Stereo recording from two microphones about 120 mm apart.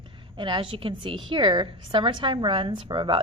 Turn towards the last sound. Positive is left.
turn(degrees=-45)  # may be behind; listen again after turning